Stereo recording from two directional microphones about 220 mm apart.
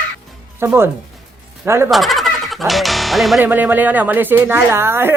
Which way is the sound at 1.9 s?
Centre (ahead or behind).